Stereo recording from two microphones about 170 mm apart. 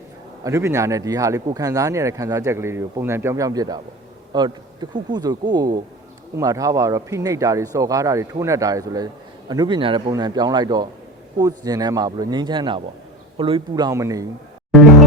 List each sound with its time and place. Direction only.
0.4 s a man's voice: 15° right (ahead or behind)